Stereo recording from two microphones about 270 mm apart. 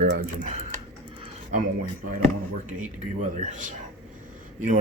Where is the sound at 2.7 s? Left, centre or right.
Right.